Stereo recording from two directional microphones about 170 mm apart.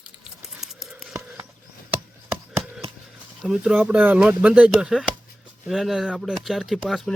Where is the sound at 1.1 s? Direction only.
15° right (ahead or behind).